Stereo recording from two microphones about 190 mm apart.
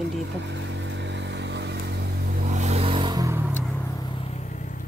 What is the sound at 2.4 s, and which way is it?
Vehicle, 40° right (ahead or behind).